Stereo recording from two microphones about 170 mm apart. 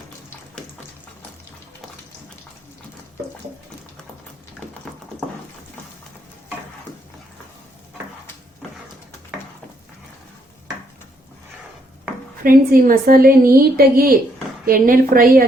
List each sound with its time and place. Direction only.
12.4 s a woman's voice: 55° right (ahead or behind)